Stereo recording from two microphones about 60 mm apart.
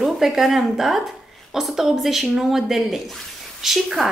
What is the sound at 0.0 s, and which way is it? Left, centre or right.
A woman's voice, centre.